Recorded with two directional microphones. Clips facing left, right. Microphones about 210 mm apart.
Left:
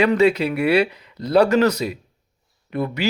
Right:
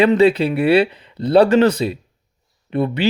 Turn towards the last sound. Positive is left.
turn(degrees=-30)  # may be behind; listen again after turning